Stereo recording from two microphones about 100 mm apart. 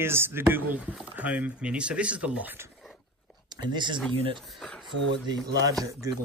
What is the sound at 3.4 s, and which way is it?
Speech, 50° right (ahead or behind).